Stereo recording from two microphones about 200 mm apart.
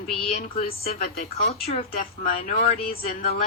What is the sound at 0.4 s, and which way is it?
A woman's voice, 45° left (ahead or behind).